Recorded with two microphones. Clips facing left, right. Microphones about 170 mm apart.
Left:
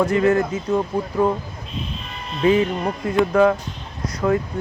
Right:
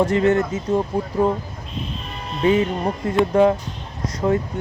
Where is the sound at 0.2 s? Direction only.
25° right (ahead or behind).